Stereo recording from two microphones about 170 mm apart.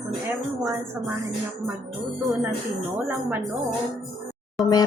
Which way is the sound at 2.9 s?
10° right (ahead or behind).